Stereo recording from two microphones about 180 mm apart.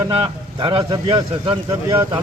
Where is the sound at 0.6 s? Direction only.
25° right (ahead or behind).